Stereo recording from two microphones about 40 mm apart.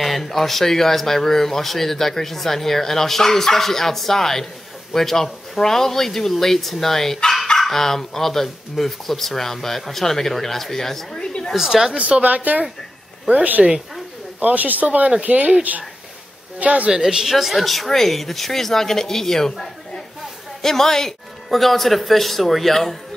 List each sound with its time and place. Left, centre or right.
0.0 s speech: centre
11.5 s speech: centre
12.0 s a man's voice: right
16.9 s speech: centre